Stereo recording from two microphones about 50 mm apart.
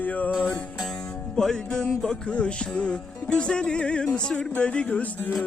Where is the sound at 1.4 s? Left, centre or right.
Centre.